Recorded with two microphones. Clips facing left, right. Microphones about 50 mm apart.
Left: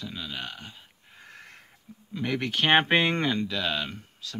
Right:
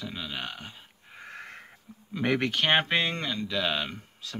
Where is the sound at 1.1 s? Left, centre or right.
Right.